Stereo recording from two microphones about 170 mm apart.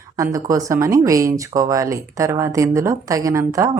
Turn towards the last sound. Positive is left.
turn(degrees=-20)  # may be behind; listen again after turning